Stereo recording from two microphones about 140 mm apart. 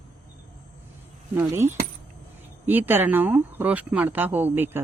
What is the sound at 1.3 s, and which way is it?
Speech, 20° right (ahead or behind).